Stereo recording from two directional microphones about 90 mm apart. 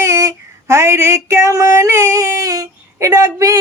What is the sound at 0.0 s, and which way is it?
Female singing, 35° right (ahead or behind).